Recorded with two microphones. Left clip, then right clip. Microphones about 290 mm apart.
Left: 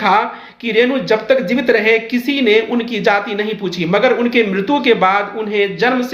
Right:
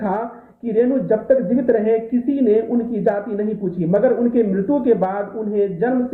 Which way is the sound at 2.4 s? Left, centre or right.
Left.